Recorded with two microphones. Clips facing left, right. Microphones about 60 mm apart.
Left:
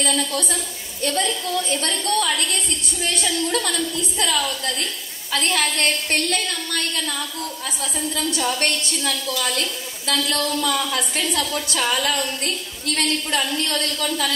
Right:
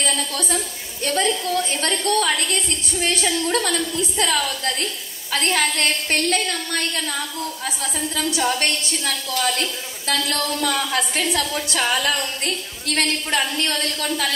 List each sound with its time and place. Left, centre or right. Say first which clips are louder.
1.0 s a woman's voice: right 2 dB; right